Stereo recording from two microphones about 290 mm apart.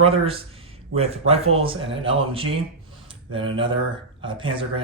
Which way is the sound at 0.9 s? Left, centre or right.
Right.